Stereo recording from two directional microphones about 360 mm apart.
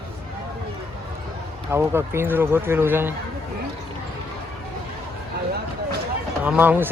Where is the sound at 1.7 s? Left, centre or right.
Centre.